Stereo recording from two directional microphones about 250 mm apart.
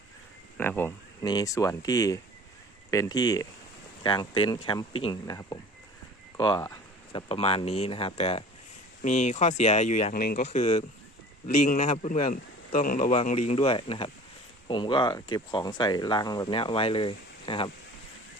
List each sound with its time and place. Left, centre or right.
0.5 s speech: centre